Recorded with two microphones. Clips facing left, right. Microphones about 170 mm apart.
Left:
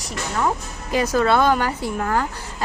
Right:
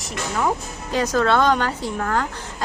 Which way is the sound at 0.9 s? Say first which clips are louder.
Left 1 dB; 10° left (ahead or behind).